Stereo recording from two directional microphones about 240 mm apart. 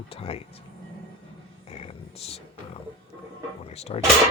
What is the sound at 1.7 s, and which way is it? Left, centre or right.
Speech, left.